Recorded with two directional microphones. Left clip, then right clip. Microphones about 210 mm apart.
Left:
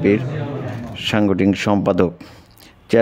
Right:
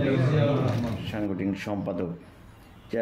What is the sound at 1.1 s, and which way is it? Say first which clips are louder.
Speech: left 16 dB; 50° left (ahead or behind).